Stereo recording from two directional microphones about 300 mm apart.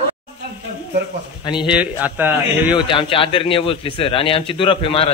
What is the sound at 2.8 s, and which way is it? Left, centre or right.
Speech, centre.